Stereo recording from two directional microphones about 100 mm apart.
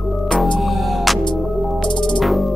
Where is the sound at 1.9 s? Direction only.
50° left (ahead or behind).